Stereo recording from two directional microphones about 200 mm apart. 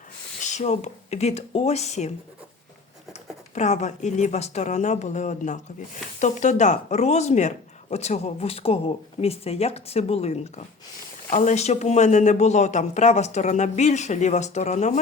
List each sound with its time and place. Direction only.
0.4 s speech: 35° left (ahead or behind)